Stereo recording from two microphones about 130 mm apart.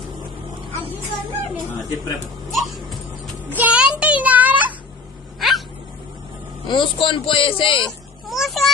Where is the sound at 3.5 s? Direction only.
10° right (ahead or behind).